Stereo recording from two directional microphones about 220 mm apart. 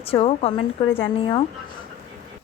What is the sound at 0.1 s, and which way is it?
Speech, 25° left (ahead or behind).